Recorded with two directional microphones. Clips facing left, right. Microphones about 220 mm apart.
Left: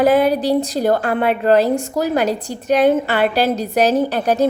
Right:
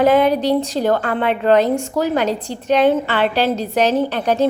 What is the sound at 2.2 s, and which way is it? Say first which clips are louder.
A woman's voice: left 1 dB; 10° left (ahead or behind).